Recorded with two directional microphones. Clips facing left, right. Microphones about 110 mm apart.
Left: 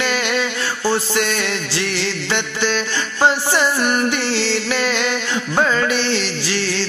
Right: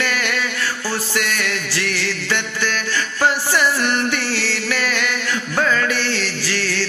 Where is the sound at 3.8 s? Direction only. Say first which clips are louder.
Left 2 dB; 10° left (ahead or behind).